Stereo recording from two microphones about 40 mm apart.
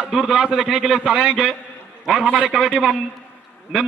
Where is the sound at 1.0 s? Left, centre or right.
Right.